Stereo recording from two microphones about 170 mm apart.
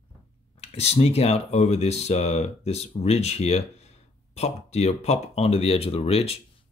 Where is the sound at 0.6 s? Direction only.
40° left (ahead or behind).